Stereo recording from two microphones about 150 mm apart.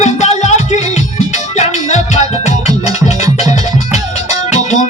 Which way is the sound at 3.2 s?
25° right (ahead or behind).